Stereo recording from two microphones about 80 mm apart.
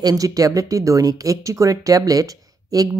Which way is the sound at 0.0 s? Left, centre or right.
Right.